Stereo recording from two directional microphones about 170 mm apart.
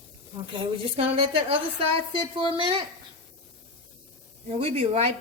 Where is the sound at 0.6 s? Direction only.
35° right (ahead or behind).